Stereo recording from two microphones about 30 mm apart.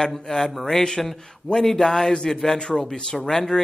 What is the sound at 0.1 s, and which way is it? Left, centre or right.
A man's voice, centre.